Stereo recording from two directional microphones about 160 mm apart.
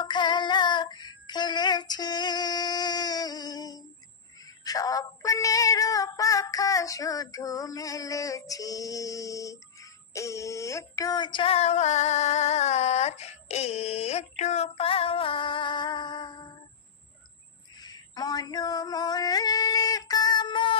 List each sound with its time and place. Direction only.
0.0 s child singing: 30° left (ahead or behind)
4.4 s female singing: 20° left (ahead or behind)
17.7 s a sound: 25° left (ahead or behind)